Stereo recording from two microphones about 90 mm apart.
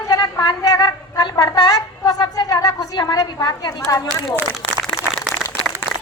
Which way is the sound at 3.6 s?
40° left (ahead or behind).